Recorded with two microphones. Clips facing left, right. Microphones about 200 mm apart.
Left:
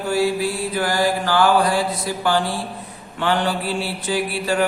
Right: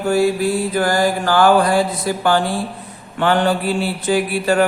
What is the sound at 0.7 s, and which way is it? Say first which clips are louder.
Mantra: right 3 dB; 45° right (ahead or behind).